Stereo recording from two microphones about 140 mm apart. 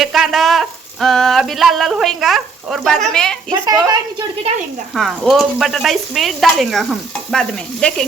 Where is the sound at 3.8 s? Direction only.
25° right (ahead or behind).